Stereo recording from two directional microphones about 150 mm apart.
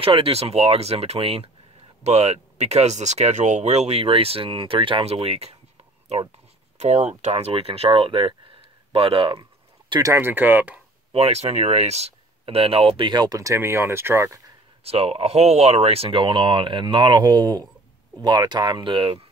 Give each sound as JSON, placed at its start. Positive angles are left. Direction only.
{"t": 0.0, "sound": "speech", "side_deg": -40}
{"t": 6.8, "sound": "speech", "side_deg": -50}
{"t": 8.9, "sound": "a sound", "side_deg": -35}
{"t": 10.1, "sound": "speech", "side_deg": -15}
{"t": 11.1, "sound": "speech", "side_deg": -40}
{"t": 14.8, "sound": "speech", "side_deg": -40}